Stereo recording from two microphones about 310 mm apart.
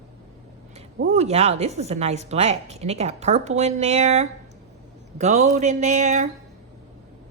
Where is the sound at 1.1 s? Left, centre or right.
Right.